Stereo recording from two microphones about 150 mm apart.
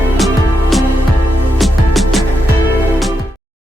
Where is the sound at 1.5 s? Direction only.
Centre (ahead or behind).